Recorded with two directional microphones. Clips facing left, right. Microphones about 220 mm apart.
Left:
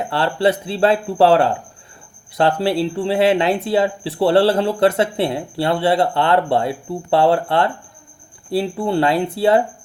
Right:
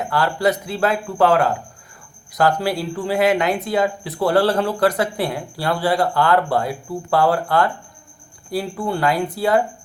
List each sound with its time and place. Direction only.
0.0 s speech: 30° left (ahead or behind)